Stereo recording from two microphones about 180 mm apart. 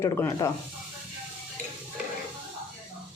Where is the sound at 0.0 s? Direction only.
15° left (ahead or behind).